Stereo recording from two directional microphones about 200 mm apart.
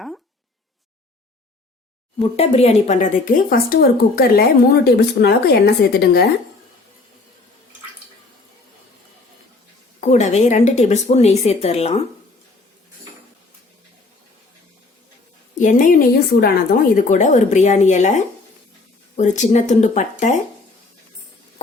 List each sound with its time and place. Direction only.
2.3 s speech: 30° left (ahead or behind); by 6.2 s 55° left (ahead or behind)
10.0 s speech: 35° left (ahead or behind)
15.5 s speech: 40° left (ahead or behind)